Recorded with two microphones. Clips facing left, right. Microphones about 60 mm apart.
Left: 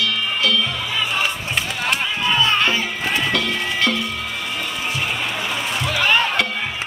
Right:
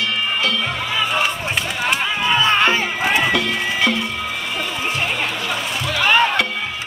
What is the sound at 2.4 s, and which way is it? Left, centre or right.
Music, right.